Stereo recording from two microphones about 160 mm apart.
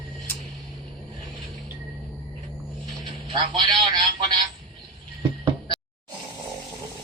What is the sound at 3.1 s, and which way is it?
Telephone, 30° right (ahead or behind).